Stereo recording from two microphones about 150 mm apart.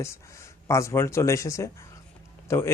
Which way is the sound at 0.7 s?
20° left (ahead or behind).